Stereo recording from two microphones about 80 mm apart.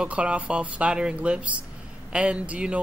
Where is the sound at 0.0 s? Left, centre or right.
Centre.